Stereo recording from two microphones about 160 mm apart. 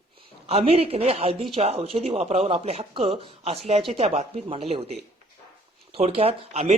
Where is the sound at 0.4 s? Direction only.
40° right (ahead or behind).